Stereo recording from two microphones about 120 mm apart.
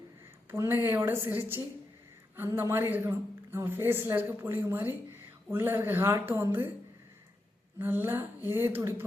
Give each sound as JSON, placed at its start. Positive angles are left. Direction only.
{"t": 0.5, "sound": "a woman's voice", "side_deg": -20}
{"t": 7.8, "sound": "a woman's voice", "side_deg": -15}